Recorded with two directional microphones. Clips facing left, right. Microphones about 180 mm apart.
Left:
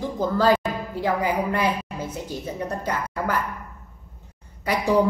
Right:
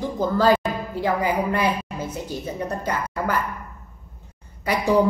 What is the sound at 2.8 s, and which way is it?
Speech, 5° right (ahead or behind).